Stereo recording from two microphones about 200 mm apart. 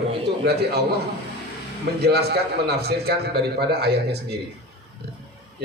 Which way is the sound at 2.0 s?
55° right (ahead or behind).